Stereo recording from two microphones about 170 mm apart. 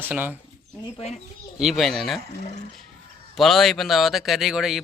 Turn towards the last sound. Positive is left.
turn(degrees=-5)  # may be behind; listen again after turning